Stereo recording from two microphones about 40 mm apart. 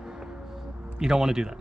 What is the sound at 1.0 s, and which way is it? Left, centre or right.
Speech, centre.